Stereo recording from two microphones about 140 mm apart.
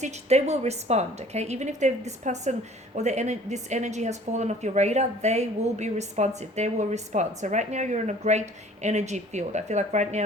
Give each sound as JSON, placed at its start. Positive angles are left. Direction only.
{"t": 0.0, "sound": "a woman's voice", "side_deg": -50}